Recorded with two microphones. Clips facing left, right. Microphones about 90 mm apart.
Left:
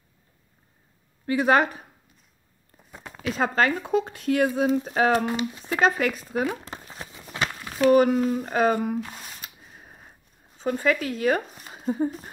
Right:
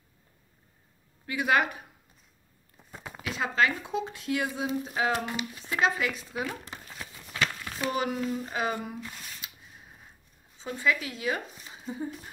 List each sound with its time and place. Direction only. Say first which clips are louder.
1.2 s a woman's voice: left 6 dB; 35° left (ahead or behind)
3.2 s speech: left 4 dB; 40° left (ahead or behind)
5.2 s a woman's voice: left 8 dB; 35° left (ahead or behind)
5.7 s speech: left 5 dB; 45° left (ahead or behind)
6.6 s a sound: left 4 dB; 35° left (ahead or behind)
7.9 s speech: left 11 dB; 45° left (ahead or behind)
9.1 s a sound: left 3 dB; 40° left (ahead or behind)
10.6 s speech: left 5 dB; 50° left (ahead or behind)